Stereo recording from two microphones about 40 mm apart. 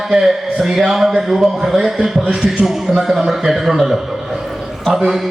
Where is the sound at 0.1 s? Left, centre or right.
Centre.